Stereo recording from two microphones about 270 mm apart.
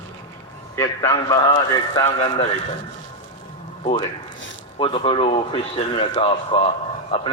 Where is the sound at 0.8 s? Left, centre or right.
Centre.